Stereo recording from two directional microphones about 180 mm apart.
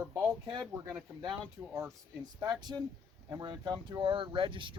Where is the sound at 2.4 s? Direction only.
25° right (ahead or behind).